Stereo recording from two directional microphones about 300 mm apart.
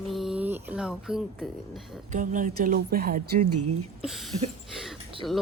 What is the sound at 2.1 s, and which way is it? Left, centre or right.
Speech, right.